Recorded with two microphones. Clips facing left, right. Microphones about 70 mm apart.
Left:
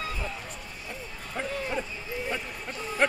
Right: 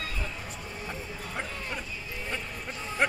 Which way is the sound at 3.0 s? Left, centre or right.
Centre.